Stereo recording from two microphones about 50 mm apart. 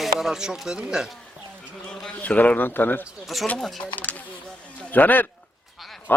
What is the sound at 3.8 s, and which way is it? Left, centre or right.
Speech, left.